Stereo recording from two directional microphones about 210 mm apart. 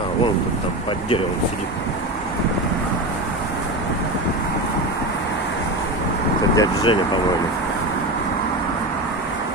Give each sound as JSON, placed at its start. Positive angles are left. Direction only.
{"t": 6.5, "sound": "speech", "side_deg": 20}